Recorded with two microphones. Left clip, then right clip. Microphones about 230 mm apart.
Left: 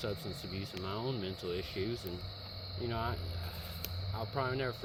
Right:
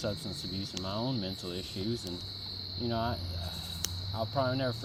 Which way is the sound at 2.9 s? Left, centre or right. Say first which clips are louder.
Right 4 dB; left.